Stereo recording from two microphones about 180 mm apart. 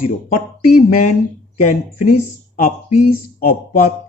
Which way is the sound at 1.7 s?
45° left (ahead or behind).